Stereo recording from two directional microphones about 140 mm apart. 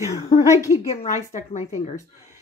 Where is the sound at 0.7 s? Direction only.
55° left (ahead or behind).